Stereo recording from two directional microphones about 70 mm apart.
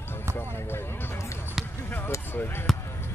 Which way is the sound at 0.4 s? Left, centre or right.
Left.